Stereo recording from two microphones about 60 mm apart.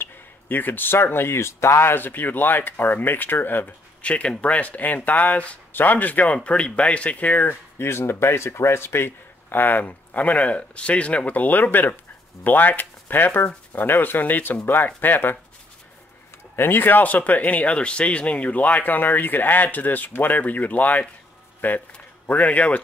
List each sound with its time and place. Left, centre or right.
0.0 s a sound: left
1.0 s speech: left
4.0 s speech: left
16.5 s speech: left